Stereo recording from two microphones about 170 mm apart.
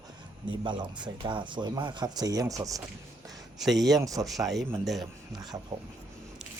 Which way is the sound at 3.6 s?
Centre (ahead or behind).